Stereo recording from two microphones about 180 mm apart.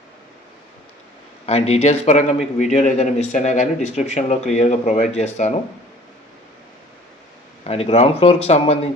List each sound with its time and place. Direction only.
1.5 s a man's voice: 35° left (ahead or behind)
7.6 s a man's voice: 35° left (ahead or behind)